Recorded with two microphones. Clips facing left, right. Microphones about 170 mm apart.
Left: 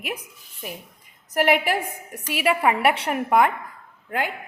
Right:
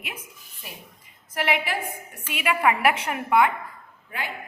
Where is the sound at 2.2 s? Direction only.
35° left (ahead or behind).